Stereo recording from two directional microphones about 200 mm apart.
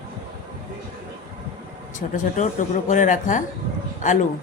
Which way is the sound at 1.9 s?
40° left (ahead or behind).